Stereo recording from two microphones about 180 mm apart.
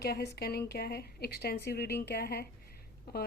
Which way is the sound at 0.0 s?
60° left (ahead or behind).